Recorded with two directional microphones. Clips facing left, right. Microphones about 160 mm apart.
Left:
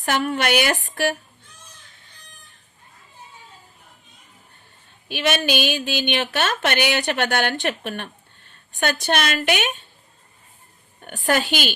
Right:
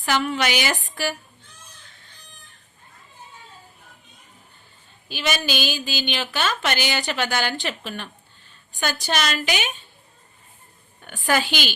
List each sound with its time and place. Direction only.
0.0 s a woman's voice: 50° left (ahead or behind)
5.0 s a woman's voice: 60° left (ahead or behind)